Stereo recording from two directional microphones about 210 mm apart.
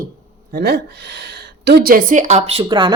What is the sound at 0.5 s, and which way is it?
A woman's voice, 50° right (ahead or behind).